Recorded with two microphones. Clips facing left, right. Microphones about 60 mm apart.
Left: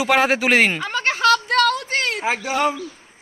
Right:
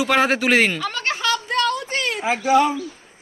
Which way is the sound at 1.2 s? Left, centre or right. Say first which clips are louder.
Left 7 dB; left.